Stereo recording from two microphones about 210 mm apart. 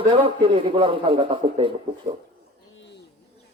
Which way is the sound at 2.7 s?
60° left (ahead or behind).